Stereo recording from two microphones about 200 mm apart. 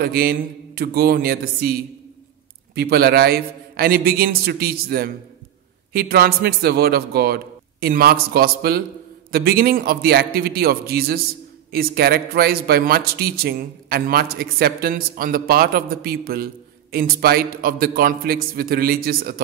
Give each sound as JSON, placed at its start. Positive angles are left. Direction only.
{"t": 0.0, "sound": "a man's voice", "side_deg": -50}